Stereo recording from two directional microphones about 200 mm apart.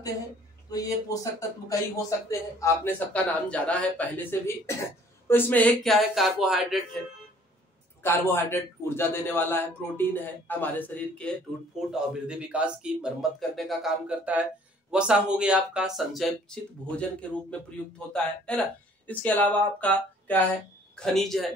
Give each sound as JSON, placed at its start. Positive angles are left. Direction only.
{"t": 0.7, "sound": "a man's voice", "side_deg": 20}
{"t": 8.0, "sound": "a man's voice", "side_deg": 10}
{"t": 11.9, "sound": "speech", "side_deg": -5}